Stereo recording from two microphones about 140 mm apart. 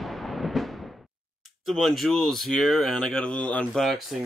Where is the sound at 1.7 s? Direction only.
Centre (ahead or behind).